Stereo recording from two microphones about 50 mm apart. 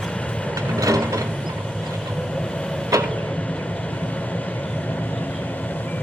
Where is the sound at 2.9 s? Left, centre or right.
Right.